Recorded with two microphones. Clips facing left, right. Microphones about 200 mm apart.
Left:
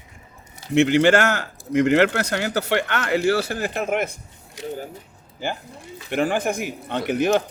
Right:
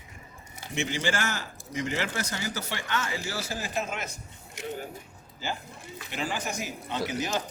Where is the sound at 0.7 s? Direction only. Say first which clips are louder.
Left 14 dB; 65° left (ahead or behind).